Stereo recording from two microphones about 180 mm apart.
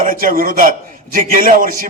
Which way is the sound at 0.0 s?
50° right (ahead or behind).